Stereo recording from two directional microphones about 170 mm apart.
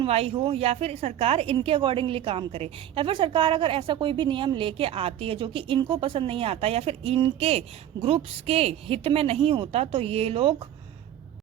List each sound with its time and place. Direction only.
0.0 s a woman's voice: 35° right (ahead or behind)